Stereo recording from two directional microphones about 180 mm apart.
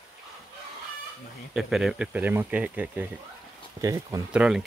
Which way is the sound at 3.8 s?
20° right (ahead or behind).